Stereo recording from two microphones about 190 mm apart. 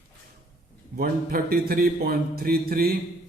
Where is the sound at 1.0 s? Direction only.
55° right (ahead or behind).